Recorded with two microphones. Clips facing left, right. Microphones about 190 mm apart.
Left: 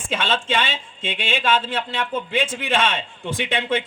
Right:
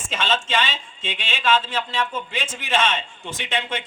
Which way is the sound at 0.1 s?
55° left (ahead or behind).